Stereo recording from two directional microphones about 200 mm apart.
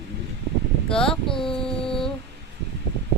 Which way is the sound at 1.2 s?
25° left (ahead or behind).